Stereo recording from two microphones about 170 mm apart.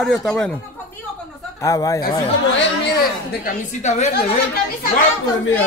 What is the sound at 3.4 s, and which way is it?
Speech, 45° left (ahead or behind).